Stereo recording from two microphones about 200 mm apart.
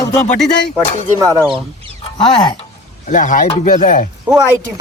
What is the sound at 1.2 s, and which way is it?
Speech, 15° right (ahead or behind).